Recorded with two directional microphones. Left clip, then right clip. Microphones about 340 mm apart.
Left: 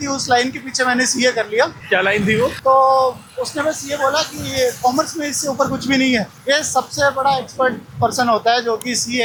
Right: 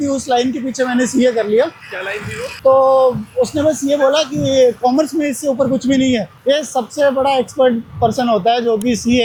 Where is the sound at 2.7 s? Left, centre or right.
Centre.